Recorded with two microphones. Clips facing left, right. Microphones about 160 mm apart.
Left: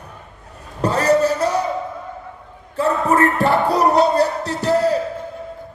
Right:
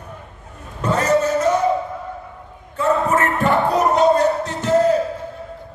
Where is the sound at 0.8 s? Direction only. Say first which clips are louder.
Left 2 dB; 35° left (ahead or behind).